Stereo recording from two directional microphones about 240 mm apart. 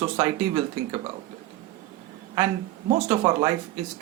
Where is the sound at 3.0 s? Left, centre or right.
Centre.